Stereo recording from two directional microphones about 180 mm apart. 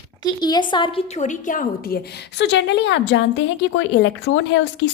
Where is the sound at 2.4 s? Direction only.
75° left (ahead or behind).